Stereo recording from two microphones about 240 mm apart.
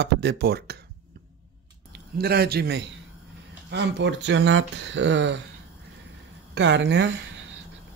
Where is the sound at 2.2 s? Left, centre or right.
Right.